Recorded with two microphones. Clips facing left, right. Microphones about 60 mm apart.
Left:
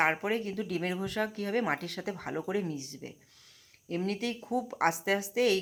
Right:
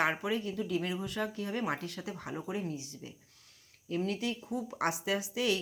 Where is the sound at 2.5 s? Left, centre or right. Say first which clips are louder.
Left 4 dB; left.